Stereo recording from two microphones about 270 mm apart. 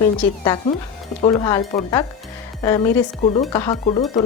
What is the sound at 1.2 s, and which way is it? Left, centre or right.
Speech, centre.